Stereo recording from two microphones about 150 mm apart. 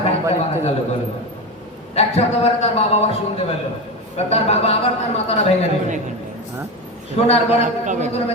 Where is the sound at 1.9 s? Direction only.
45° left (ahead or behind).